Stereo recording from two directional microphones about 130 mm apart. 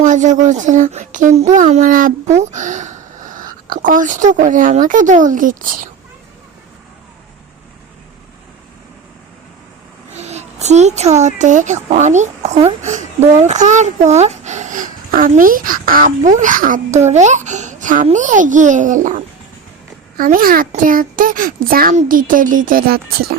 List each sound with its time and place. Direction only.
0.0 s speech: 70° right (ahead or behind); by 5.9 s 90° right
10.2 s a child's voice: 60° right (ahead or behind)
12.8 s speech: 70° right (ahead or behind)
20.1 s a child's voice: 90° right